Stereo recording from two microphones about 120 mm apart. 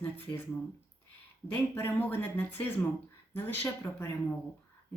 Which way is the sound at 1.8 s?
15° left (ahead or behind).